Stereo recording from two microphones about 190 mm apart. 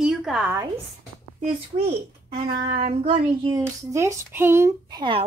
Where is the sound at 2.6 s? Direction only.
30° right (ahead or behind).